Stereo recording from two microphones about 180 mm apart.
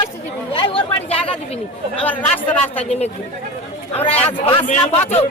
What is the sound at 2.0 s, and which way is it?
Speech, 10° left (ahead or behind).